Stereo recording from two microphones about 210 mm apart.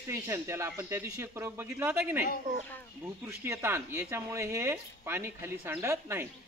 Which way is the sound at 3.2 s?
10° right (ahead or behind).